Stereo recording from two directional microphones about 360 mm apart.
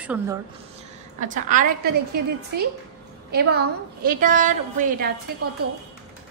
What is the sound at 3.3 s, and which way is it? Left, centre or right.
A woman's voice, right.